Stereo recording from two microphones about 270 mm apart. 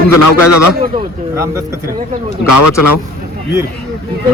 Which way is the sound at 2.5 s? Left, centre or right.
Left.